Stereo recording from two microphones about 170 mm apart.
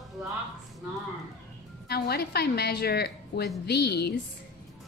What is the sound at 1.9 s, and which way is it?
A woman's voice, 70° left (ahead or behind).